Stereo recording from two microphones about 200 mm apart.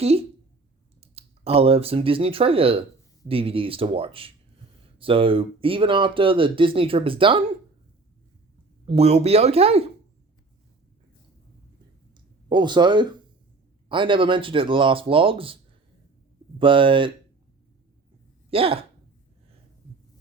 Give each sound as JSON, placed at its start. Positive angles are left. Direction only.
{"t": 0.0, "sound": "speech", "side_deg": -30}
{"t": 8.9, "sound": "speech", "side_deg": -30}
{"t": 12.5, "sound": "speech", "side_deg": -20}
{"t": 16.6, "sound": "speech", "side_deg": -25}
{"t": 18.5, "sound": "speech", "side_deg": -30}